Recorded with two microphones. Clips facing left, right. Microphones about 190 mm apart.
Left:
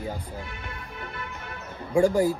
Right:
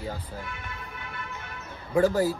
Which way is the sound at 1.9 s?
15° left (ahead or behind).